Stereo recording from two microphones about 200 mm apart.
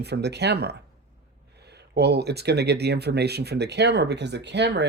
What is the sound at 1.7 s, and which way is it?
Speech, 55° right (ahead or behind).